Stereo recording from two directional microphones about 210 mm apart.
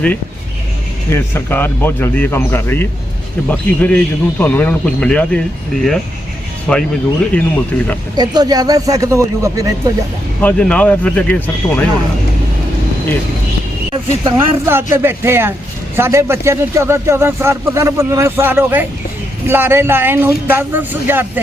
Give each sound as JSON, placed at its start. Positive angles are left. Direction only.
{"t": 1.1, "sound": "a man's voice", "side_deg": 10}
{"t": 6.7, "sound": "a man's voice", "side_deg": 5}
{"t": 8.1, "sound": "speech", "side_deg": -20}
{"t": 10.4, "sound": "a man's voice", "side_deg": 5}
{"t": 14.3, "sound": "speech", "side_deg": -10}